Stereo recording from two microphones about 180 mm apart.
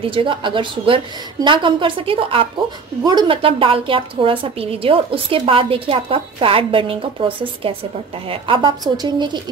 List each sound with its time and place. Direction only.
0.0 s a woman's voice: 30° right (ahead or behind)